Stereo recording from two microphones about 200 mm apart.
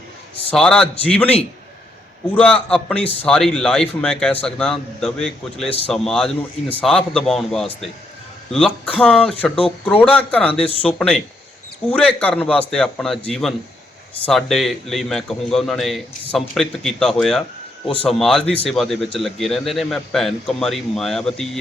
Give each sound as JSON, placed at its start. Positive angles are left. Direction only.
{"t": 0.5, "sound": "a man's voice", "side_deg": 5}